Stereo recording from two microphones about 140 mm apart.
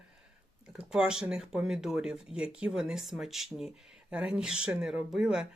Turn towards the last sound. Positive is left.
turn(degrees=-5)  # may be behind; listen again after turning